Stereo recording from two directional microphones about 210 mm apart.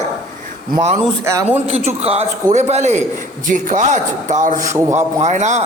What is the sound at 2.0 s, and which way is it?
A man's voice, 30° right (ahead or behind).